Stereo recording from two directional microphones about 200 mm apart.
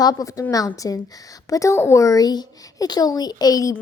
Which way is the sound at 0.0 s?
20° left (ahead or behind).